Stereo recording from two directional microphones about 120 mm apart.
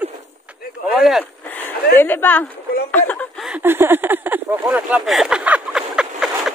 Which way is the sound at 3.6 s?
20° right (ahead or behind).